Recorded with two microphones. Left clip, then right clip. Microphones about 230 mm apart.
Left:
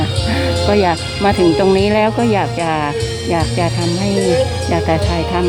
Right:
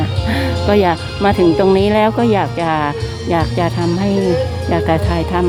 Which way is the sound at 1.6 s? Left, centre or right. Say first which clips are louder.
Right 1 dB; centre.